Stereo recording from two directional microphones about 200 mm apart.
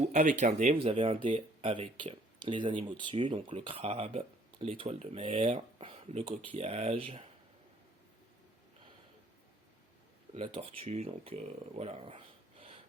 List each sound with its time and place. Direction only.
0.1 s speech: 35° right (ahead or behind)
10.3 s speech: 25° right (ahead or behind)